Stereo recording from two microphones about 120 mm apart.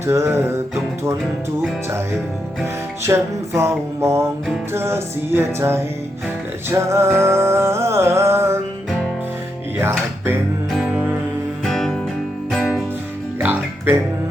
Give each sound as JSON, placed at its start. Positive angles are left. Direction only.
{"t": 0.0, "sound": "music", "side_deg": -25}
{"t": 3.0, "sound": "music", "side_deg": -25}
{"t": 9.7, "sound": "music", "side_deg": -20}
{"t": 10.7, "sound": "music", "side_deg": -10}
{"t": 11.6, "sound": "music", "side_deg": 0}
{"t": 13.4, "sound": "music", "side_deg": -15}